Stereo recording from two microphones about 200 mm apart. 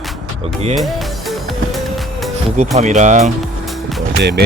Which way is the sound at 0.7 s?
Centre (ahead or behind).